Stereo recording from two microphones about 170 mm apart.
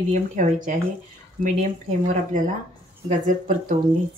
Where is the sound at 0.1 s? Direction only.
50° right (ahead or behind).